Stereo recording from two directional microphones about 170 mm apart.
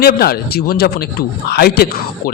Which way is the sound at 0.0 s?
65° left (ahead or behind).